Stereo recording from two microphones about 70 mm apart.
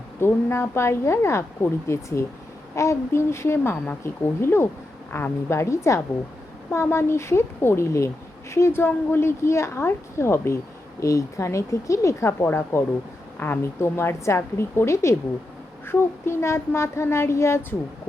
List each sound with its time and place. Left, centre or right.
0.2 s speech: left
11.0 s speech: left
12.4 s speech: left